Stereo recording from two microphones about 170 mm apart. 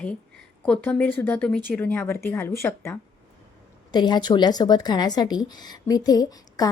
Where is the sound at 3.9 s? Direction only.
25° left (ahead or behind).